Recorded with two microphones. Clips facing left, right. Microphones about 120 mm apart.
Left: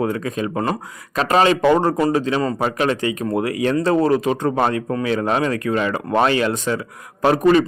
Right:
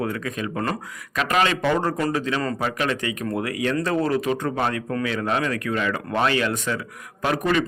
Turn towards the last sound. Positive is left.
turn(degrees=35)  # may be behind; listen again after turning